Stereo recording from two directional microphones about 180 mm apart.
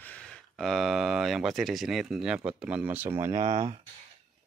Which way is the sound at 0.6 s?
Centre (ahead or behind).